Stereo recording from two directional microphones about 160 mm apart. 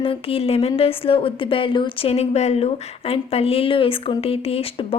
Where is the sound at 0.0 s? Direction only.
35° left (ahead or behind).